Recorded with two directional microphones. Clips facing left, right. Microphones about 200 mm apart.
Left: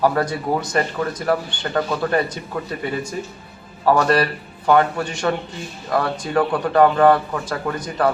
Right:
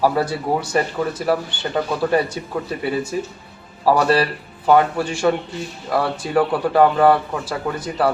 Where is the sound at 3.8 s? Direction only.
5° right (ahead or behind).